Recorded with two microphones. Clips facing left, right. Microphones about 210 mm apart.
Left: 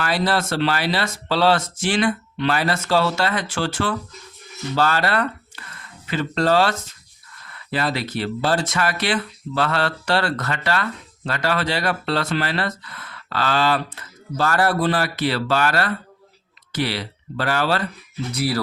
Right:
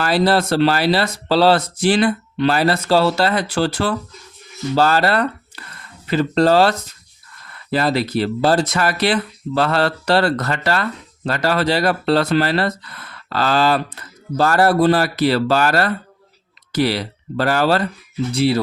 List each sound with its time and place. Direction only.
0.0 s speech: 35° right (ahead or behind)
18.3 s speech: 25° right (ahead or behind)